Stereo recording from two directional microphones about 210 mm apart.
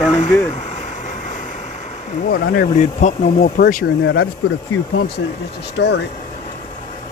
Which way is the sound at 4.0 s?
55° left (ahead or behind).